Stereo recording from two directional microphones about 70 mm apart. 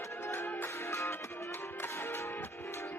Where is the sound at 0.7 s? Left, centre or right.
Left.